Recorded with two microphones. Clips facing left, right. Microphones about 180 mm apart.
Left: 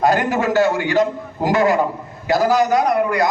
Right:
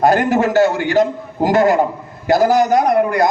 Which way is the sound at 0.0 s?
45° right (ahead or behind).